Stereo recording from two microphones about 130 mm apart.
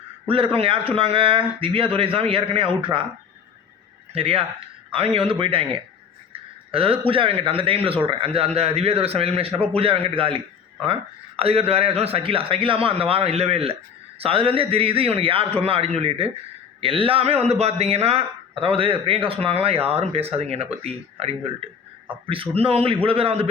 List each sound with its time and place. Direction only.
0.3 s a man's voice: 45° right (ahead or behind)
4.1 s a man's voice: 45° right (ahead or behind)
6.7 s a man's voice: 45° right (ahead or behind)